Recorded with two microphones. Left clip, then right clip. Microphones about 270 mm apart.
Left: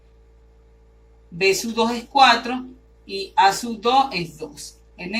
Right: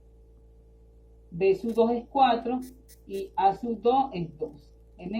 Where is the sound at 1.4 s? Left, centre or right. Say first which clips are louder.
Left 4 dB; left.